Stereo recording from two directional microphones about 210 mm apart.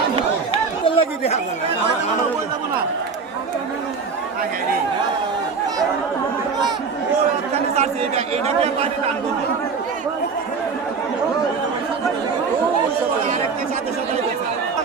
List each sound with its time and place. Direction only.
0.9 s chatter: 30° left (ahead or behind)
7.5 s speech: 30° right (ahead or behind)